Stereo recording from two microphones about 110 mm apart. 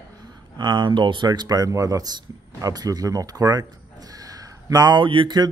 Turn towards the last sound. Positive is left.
turn(degrees=-45)  # may be behind; listen again after turning